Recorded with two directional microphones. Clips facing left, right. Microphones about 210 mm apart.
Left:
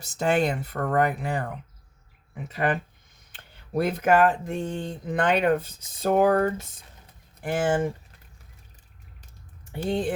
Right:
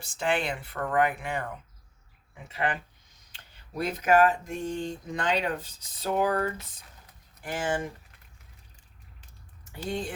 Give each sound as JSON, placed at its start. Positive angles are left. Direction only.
{"t": 0.0, "sound": "speech", "side_deg": 40}
{"t": 9.7, "sound": "speech", "side_deg": 55}